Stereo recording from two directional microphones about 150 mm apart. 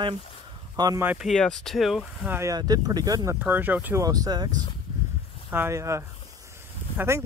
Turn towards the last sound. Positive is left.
turn(degrees=-20)  # may be behind; listen again after turning